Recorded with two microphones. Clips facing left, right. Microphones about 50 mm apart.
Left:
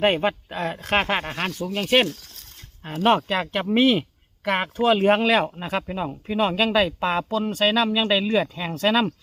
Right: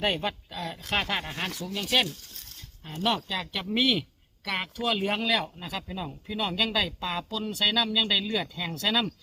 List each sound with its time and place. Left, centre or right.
0.0 s speech: left
3.0 s speech: left
4.9 s speech: left